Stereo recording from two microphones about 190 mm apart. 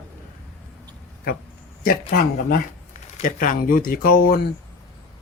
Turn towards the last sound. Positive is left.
turn(degrees=50)  # may be behind; listen again after turning